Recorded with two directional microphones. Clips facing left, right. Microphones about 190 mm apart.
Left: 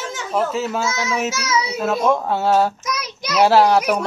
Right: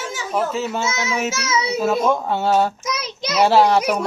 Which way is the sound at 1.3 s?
25° right (ahead or behind).